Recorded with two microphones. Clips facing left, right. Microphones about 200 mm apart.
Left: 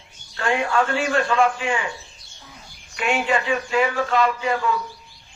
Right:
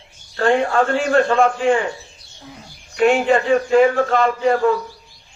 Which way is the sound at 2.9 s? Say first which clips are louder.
Right 8 dB; 40° right (ahead or behind).